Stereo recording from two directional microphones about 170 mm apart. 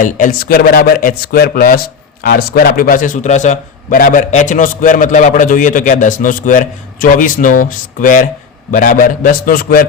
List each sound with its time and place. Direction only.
0.0 s a man's voice: 55° left (ahead or behind)